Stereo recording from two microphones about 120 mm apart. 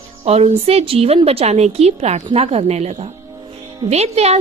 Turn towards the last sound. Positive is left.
turn(degrees=-60)  # may be behind; listen again after turning